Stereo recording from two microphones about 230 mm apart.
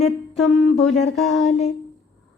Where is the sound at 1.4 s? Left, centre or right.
Left.